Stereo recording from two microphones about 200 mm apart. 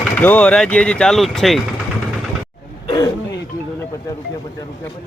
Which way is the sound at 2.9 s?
20° left (ahead or behind).